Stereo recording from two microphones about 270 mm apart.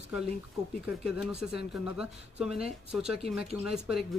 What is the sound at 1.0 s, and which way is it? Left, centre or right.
Speech, centre.